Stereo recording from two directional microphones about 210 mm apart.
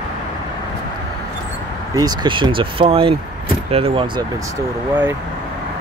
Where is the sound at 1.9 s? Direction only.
20° right (ahead or behind).